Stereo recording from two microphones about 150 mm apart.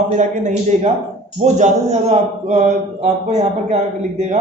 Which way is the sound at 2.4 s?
50° right (ahead or behind).